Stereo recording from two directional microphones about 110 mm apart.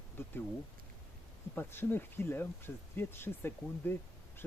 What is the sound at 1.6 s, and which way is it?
Speech, 20° left (ahead or behind).